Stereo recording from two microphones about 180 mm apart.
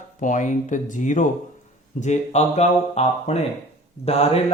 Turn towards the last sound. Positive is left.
turn(degrees=35)  # may be behind; listen again after turning